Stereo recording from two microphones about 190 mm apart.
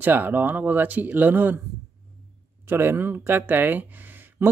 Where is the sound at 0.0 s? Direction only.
10° right (ahead or behind).